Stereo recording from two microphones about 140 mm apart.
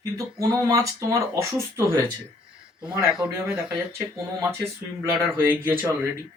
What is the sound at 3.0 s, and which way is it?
Speech, 5° right (ahead or behind).